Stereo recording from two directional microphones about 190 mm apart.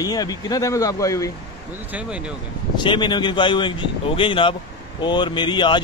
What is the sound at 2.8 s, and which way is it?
Speech, 25° left (ahead or behind).